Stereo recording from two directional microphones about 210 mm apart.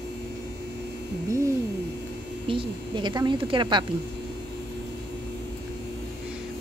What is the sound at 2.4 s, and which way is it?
A woman's voice, 25° right (ahead or behind).